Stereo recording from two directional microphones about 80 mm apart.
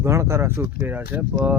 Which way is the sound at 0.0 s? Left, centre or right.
Right.